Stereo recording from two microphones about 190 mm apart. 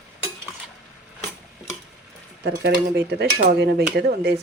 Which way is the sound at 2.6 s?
60° right (ahead or behind).